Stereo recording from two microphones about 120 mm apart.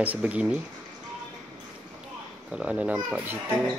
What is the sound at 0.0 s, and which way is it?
Speech, 10° right (ahead or behind).